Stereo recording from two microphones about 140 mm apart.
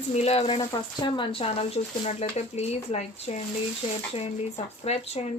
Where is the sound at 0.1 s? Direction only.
50° left (ahead or behind).